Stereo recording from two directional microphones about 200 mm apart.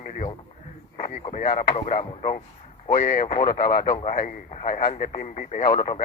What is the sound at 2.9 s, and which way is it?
Speech, 45° left (ahead or behind).